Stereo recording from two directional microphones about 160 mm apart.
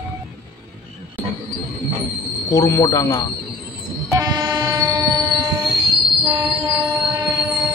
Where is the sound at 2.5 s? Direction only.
20° left (ahead or behind).